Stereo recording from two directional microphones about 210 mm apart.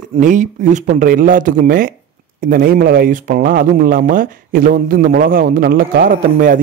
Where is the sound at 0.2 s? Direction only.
35° right (ahead or behind).